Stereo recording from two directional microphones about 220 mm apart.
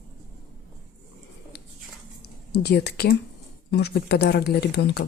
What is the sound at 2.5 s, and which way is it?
Speech, 50° left (ahead or behind).